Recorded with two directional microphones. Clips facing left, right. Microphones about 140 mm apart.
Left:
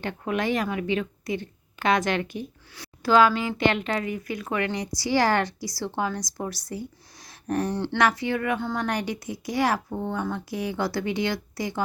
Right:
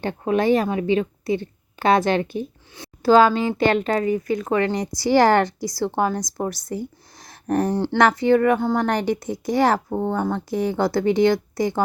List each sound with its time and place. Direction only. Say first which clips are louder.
0.0 s a woman's voice: right 7 dB; 30° right (ahead or behind); by 11.8 s 50° right (ahead or behind)